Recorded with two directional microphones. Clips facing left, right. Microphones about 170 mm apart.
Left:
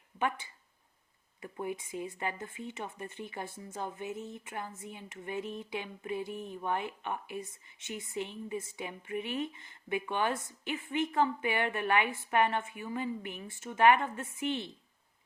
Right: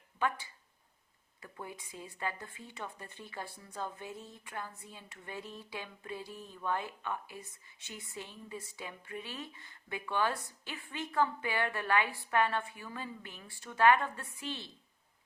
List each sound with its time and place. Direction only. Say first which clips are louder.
0.2 s a woman's voice: left 1 dB; 20° left (ahead or behind)
6.3 s speech: left 8 dB; 55° left (ahead or behind)
6.6 s a woman's voice: even; 20° left (ahead or behind)